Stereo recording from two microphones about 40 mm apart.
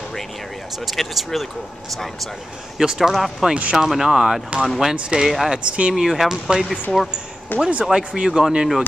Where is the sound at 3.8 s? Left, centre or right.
Centre.